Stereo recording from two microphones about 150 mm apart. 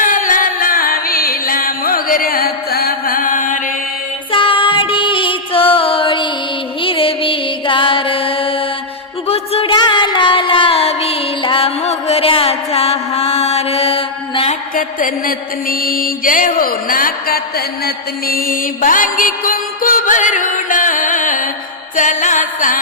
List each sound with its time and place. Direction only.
0.0 s music: 60° left (ahead or behind)
4.3 s music: 35° left (ahead or behind)
14.8 s mantra: 70° left (ahead or behind)
21.9 s music: 55° left (ahead or behind)